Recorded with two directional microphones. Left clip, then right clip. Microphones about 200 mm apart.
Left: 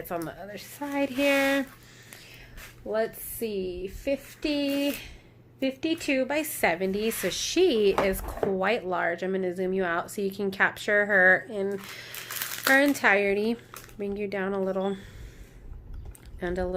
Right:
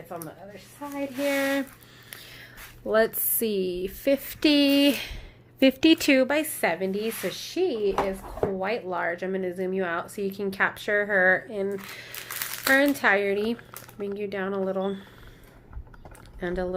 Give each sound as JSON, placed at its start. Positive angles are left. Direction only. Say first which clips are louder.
{"t": 0.1, "sound": "a woman's voice", "louder": "left 4 dB", "side_deg": 55}
{"t": 1.2, "sound": "speech", "louder": "left 1 dB", "side_deg": 20}
{"t": 2.8, "sound": "speech", "louder": "right 6 dB", "side_deg": -20}
{"t": 6.2, "sound": "a woman's voice", "louder": "right 3 dB", "side_deg": -10}
{"t": 6.6, "sound": "speech", "louder": "even", "side_deg": 10}
{"t": 8.5, "sound": "speech", "louder": "left 2 dB", "side_deg": 20}
{"t": 16.4, "sound": "speech", "louder": "right 1 dB", "side_deg": 0}